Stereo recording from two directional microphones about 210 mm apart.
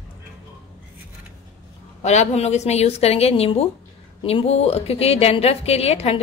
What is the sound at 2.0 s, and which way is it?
A woman's voice, 30° left (ahead or behind).